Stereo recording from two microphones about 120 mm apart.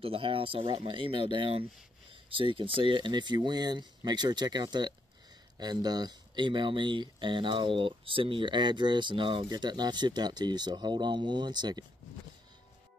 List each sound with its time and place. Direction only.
0.0 s speech: 50° right (ahead or behind)